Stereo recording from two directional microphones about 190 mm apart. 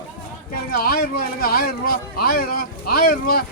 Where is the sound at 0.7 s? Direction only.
50° left (ahead or behind).